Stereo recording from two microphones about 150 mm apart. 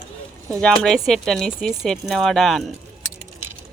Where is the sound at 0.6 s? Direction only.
5° left (ahead or behind).